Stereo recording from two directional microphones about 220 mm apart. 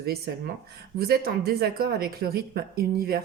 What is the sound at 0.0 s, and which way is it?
Speech, 45° right (ahead or behind).